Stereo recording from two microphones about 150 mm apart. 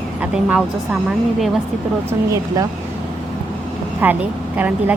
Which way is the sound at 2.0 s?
20° right (ahead or behind).